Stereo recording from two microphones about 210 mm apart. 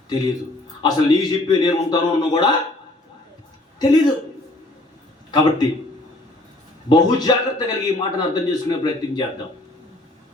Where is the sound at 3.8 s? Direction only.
20° left (ahead or behind).